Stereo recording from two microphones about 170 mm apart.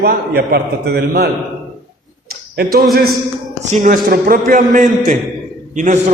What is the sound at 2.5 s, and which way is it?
A man's voice, 60° right (ahead or behind).